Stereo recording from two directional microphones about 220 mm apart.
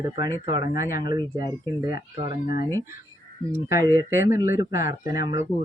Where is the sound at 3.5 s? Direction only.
10° right (ahead or behind).